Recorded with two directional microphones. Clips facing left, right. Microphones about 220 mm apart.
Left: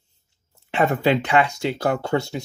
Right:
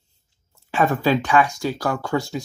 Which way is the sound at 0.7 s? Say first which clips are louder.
Even; 20° left (ahead or behind).